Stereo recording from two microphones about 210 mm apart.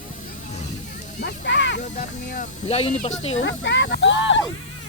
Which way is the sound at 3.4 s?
60° left (ahead or behind).